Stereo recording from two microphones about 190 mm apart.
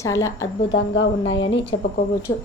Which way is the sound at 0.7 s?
70° left (ahead or behind).